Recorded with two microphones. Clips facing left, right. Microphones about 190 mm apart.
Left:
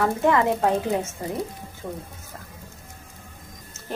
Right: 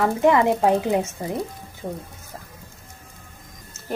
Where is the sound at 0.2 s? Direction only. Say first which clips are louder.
Right 5 dB; 15° right (ahead or behind).